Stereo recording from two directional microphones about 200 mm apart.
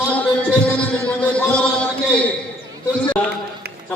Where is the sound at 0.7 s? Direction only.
5° left (ahead or behind).